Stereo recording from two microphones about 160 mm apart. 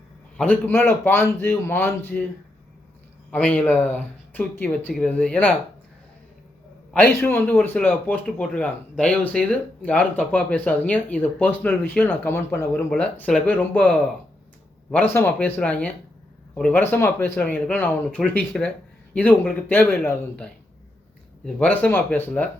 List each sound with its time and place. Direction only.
0.3 s a man's voice: 10° left (ahead or behind)
3.3 s a man's voice: 10° left (ahead or behind)
6.9 s a man's voice: 15° left (ahead or behind)
15.1 s a man's voice: 15° left (ahead or behind)